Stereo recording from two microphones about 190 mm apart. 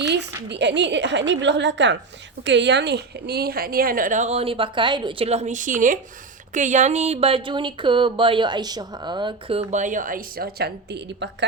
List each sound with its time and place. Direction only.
0.0 s a woman's voice: 65° right (ahead or behind)